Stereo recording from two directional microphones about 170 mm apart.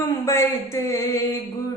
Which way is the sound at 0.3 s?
15° left (ahead or behind).